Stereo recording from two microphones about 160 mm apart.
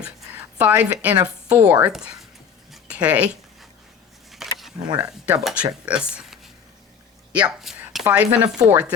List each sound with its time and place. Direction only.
0.0 s a sound: 10° right (ahead or behind)
1.5 s speech: 20° right (ahead or behind)
1.7 s speech: 10° right (ahead or behind)
2.7 s dog: 5° right (ahead or behind)
4.4 s camera: centre (ahead or behind)
4.9 s speech: 20° right (ahead or behind)
5.2 s speech: 5° right (ahead or behind)